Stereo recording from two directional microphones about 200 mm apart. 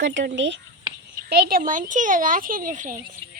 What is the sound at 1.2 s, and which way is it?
Speech, 50° right (ahead or behind).